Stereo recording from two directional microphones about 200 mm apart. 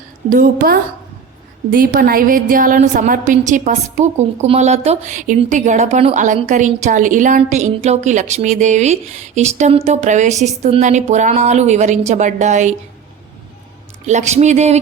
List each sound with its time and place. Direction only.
0.3 s a woman's voice: 45° right (ahead or behind)
14.1 s a woman's voice: 35° right (ahead or behind)